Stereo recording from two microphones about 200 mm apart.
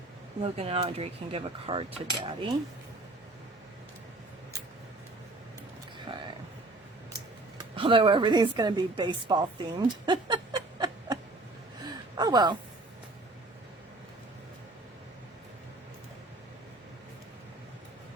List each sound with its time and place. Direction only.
0.4 s cutlery: 30° right (ahead or behind)
7.6 s a woman's voice: 25° right (ahead or behind)
11.9 s gasp: 20° right (ahead or behind)